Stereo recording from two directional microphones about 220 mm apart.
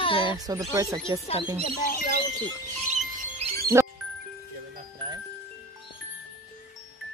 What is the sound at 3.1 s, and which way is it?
Music, 30° right (ahead or behind).